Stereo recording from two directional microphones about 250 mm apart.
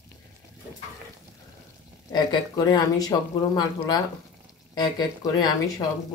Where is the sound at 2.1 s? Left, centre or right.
Centre.